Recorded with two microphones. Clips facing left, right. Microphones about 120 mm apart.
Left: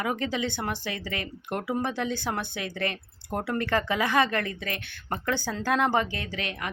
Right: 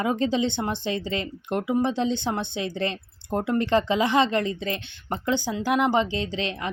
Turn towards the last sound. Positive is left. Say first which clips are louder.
# right 6 dB
turn(degrees=-25)  # may be behind; listen again after turning